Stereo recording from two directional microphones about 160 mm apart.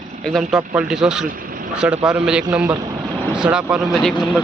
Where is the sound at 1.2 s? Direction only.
60° right (ahead or behind).